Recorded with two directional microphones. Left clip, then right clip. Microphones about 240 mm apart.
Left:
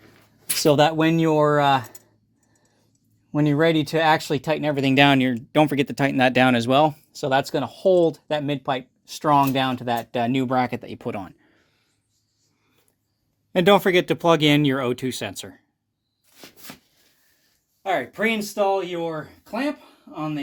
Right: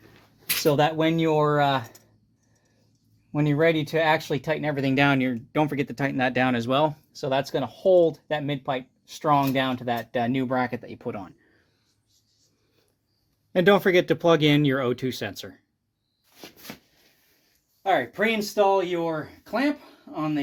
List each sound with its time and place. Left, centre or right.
0.6 s speech: left
3.3 s speech: left
13.5 s speech: centre
17.8 s speech: centre